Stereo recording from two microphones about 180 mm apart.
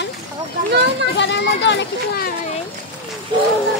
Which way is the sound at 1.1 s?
75° left (ahead or behind).